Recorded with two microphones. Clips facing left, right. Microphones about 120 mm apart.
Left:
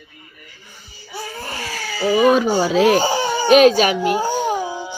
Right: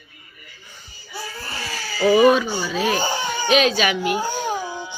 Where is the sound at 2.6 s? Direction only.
85° left.